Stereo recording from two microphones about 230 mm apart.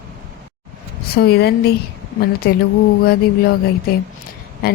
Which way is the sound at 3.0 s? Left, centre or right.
Left.